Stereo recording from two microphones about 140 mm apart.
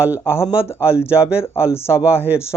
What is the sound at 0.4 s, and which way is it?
Speech, 5° right (ahead or behind).